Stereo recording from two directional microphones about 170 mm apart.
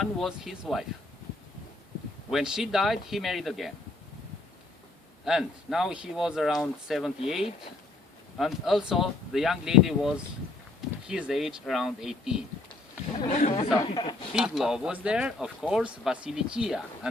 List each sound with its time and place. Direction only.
0.0 s speech: centre (ahead or behind)
2.3 s speech: 5° right (ahead or behind)
5.2 s speech: centre (ahead or behind)
8.4 s speech: centre (ahead or behind)
11.1 s speech: 5° right (ahead or behind)
13.3 s speech: 45° left (ahead or behind)
13.7 s speech: 25° left (ahead or behind)
14.3 s speech: 5° right (ahead or behind)